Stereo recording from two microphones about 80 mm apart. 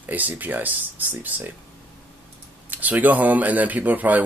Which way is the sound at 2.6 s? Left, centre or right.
Right.